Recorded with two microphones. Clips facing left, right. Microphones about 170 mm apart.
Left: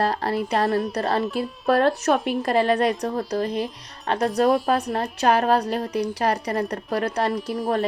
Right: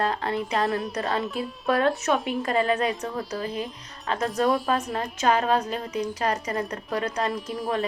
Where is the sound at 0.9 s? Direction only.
35° left (ahead or behind).